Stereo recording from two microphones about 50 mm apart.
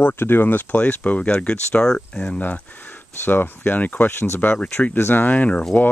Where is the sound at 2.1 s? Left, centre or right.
Left.